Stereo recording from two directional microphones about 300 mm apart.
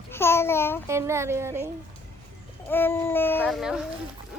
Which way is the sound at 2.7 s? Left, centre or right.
Centre.